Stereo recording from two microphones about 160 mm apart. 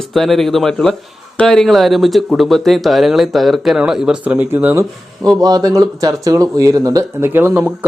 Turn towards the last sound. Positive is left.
turn(degrees=-10)  # may be behind; listen again after turning